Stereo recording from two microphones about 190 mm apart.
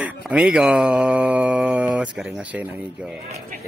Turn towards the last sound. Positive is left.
turn(degrees=-5)  # may be behind; listen again after turning